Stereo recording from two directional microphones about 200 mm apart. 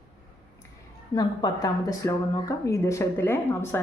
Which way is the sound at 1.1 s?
20° left (ahead or behind).